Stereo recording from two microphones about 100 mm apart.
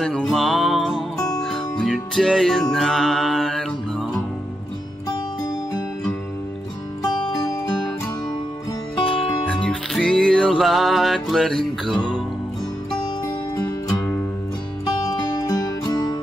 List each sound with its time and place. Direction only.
0.0 s music: 5° left (ahead or behind)
9.5 s music: 10° left (ahead or behind)
15.0 s music: 40° left (ahead or behind)